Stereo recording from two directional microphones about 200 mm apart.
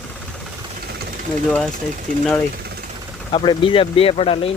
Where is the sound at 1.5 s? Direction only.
5° left (ahead or behind).